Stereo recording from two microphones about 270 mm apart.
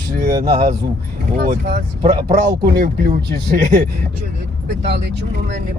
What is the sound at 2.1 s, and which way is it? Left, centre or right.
Speech, centre.